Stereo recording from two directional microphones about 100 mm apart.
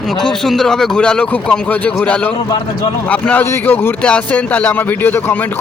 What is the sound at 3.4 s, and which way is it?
Speech, 20° left (ahead or behind).